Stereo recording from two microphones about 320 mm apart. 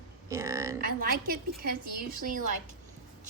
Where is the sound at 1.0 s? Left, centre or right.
Right.